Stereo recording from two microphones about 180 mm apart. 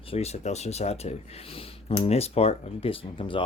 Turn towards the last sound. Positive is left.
turn(degrees=30)  # may be behind; listen again after turning